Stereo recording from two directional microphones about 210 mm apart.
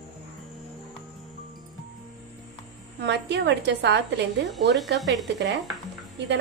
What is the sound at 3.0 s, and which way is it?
A woman's voice, 55° right (ahead or behind).